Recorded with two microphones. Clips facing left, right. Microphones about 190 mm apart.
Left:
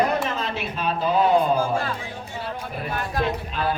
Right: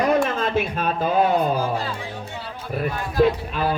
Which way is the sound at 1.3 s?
50° left (ahead or behind).